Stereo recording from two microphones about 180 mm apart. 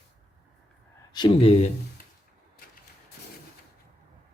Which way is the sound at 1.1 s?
30° left (ahead or behind).